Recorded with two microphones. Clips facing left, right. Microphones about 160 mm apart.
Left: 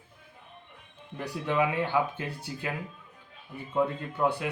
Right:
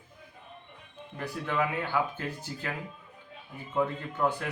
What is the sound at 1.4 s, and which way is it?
Speech, 15° left (ahead or behind).